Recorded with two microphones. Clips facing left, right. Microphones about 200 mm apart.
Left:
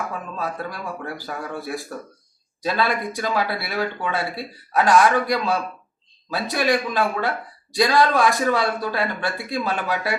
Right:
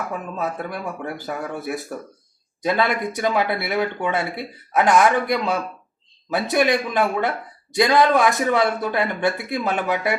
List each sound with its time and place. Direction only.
0.3 s speech: 20° right (ahead or behind)